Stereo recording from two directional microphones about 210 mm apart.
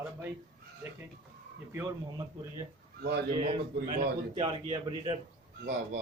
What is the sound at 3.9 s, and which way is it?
A man's voice, 25° right (ahead or behind).